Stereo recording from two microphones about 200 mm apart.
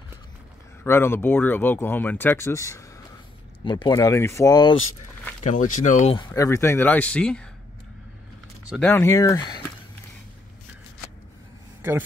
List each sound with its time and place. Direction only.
0.8 s speech: 10° left (ahead or behind)
5.4 s speech: 40° left (ahead or behind)
6.1 s speech: 20° left (ahead or behind)
8.8 s speech: 15° left (ahead or behind)